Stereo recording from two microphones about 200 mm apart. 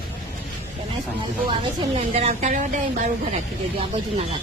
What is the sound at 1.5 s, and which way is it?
A woman's voice, 25° right (ahead or behind).